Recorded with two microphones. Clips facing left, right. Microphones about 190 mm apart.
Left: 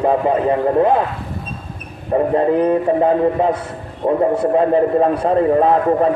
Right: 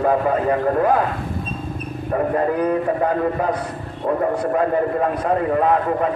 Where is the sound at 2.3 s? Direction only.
25° left (ahead or behind).